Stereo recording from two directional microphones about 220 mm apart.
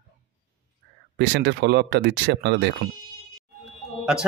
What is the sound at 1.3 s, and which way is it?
Speech, 50° right (ahead or behind).